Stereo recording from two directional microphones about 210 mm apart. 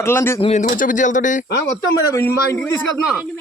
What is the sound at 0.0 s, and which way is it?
Speech, 10° left (ahead or behind).